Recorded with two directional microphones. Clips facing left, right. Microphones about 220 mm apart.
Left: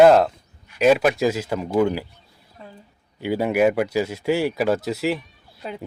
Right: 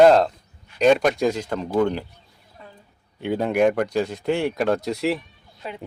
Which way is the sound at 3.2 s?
5° left (ahead or behind).